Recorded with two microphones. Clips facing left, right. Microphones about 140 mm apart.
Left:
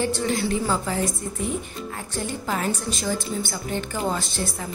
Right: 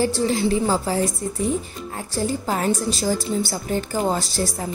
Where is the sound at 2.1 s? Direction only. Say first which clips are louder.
Right 5 dB; 40° right (ahead or behind).